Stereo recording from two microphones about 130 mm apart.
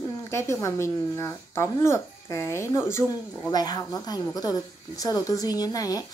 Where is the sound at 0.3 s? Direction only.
20° left (ahead or behind).